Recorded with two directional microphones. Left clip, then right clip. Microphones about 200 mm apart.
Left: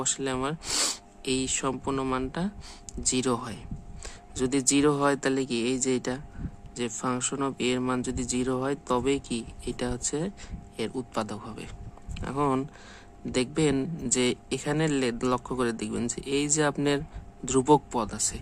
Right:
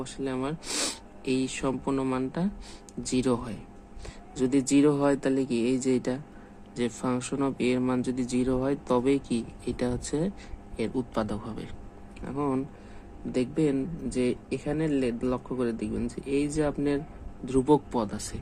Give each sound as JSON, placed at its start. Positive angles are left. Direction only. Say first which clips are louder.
{"t": 0.0, "sound": "speech", "louder": "left 3 dB", "side_deg": 25}
{"t": 12.2, "sound": "a man's voice", "louder": "left 3 dB", "side_deg": 25}